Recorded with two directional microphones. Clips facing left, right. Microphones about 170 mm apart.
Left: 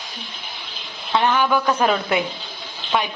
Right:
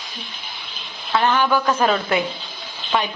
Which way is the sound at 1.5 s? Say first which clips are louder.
Even; 10° left (ahead or behind).